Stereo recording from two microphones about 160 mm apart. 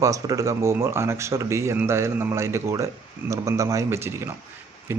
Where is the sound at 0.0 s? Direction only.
20° right (ahead or behind).